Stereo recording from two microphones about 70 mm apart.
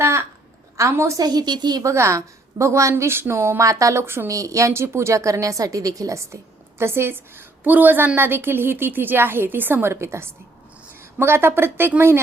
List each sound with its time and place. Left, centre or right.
0.0 s a sound: right
0.8 s a woman's voice: right
1.2 s a woman's voice: right
1.8 s a woman's voice: right
2.9 s a woman's voice: right
3.6 s a woman's voice: right
4.0 s a woman's voice: right
4.3 s a woman's voice: right